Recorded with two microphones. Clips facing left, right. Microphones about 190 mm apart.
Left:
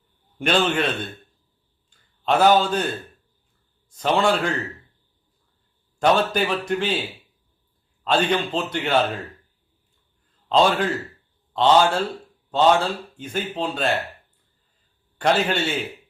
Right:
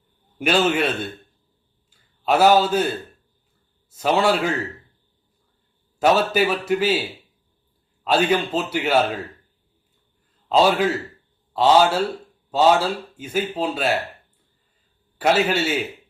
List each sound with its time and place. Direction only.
0.3 s a man's voice: 5° right (ahead or behind)
1.9 s a man's voice: 5° right (ahead or behind)
6.0 s a man's voice: 5° right (ahead or behind)
8.0 s speech: 5° right (ahead or behind)
10.5 s a man's voice: 5° right (ahead or behind)
15.2 s speech: 5° right (ahead or behind)